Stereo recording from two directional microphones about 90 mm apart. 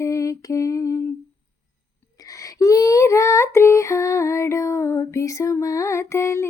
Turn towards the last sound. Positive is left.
turn(degrees=30)  # may be behind; listen again after turning